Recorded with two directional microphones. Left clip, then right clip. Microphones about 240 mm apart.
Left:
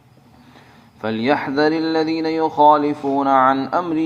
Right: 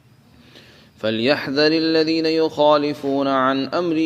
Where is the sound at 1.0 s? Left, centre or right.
Right.